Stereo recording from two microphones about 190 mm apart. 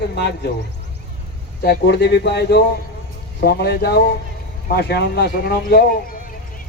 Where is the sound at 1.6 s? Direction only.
60° left (ahead or behind).